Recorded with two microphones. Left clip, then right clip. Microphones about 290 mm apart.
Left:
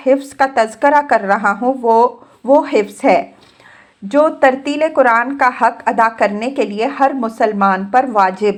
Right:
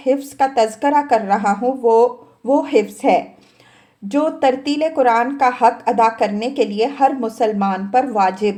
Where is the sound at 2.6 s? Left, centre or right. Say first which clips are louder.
Left 2 dB; left.